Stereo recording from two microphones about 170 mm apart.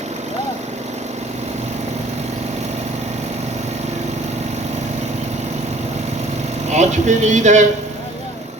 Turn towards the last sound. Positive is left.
turn(degrees=-45)  # may be behind; listen again after turning